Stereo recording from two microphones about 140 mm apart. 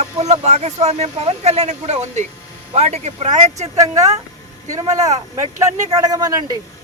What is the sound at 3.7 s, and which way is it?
Speech, 25° right (ahead or behind).